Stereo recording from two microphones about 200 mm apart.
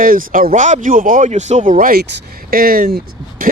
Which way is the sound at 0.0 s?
45° right (ahead or behind).